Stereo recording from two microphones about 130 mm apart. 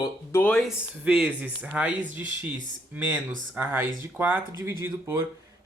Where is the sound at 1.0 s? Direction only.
10° right (ahead or behind).